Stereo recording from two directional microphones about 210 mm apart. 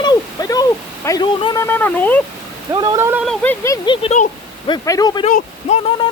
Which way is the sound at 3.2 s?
5° left (ahead or behind).